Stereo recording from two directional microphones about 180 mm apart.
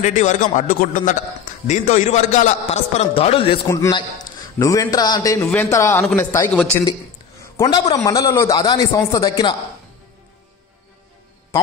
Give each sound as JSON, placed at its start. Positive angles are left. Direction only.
{"t": 0.0, "sound": "a man's voice", "side_deg": 40}
{"t": 3.6, "sound": "a man's voice", "side_deg": 15}